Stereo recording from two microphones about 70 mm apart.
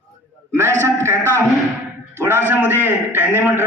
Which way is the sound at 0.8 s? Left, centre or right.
Right.